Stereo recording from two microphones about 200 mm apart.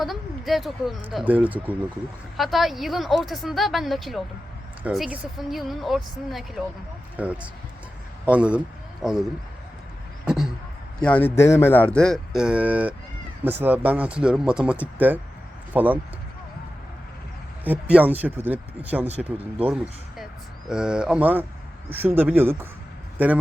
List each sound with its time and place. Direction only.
0.0 s speech: centre (ahead or behind)
10.2 s a sound: centre (ahead or behind)
11.0 s speech: 10° left (ahead or behind); by 16.0 s 10° right (ahead or behind)
17.6 s speech: 10° right (ahead or behind)
19.0 s speech: 30° right (ahead or behind)
20.7 s a man's voice: 5° right (ahead or behind)